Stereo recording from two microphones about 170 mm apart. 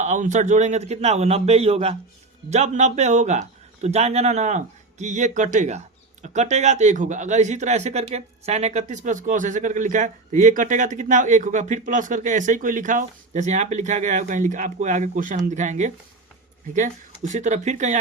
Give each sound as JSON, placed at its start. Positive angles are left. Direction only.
{"t": 0.0, "sound": "a man's voice", "side_deg": -45}